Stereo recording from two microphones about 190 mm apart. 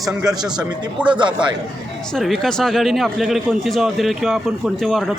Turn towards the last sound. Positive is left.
turn(degrees=0)  # may be behind; listen again after turning